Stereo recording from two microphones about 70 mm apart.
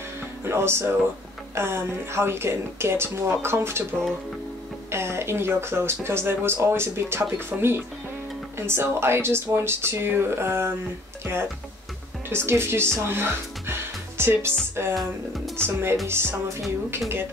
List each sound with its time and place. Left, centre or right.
0.5 s speech: right
4.9 s speech: right
12.3 s speech: right
15.0 s speech: centre
15.5 s speech: right